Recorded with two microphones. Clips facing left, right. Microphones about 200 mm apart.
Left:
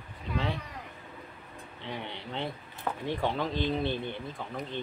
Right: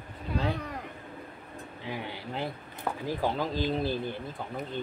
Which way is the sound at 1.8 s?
5° right (ahead or behind).